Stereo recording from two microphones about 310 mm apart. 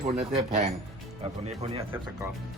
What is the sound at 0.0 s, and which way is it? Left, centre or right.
Speech, right.